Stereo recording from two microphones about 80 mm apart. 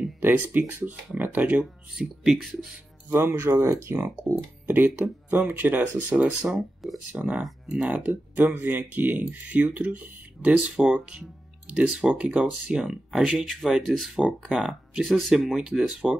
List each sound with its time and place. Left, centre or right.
0.2 s speech: right
2.0 s speech: centre
3.1 s speech: right
6.8 s a sound: centre
7.2 s speech: centre